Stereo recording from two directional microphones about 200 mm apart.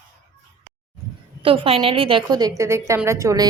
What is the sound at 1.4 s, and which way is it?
A woman's voice, 25° right (ahead or behind).